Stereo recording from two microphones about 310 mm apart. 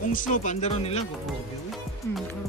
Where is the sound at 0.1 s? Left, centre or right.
Left.